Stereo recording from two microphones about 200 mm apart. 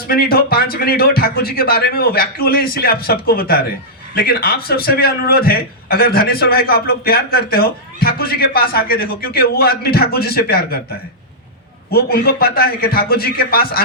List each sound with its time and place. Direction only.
0.1 s a man's voice: 50° left (ahead or behind)
11.9 s a man's voice: 50° left (ahead or behind)